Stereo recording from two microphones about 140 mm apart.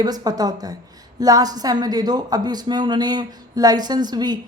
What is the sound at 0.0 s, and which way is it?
A woman's voice, 30° right (ahead or behind).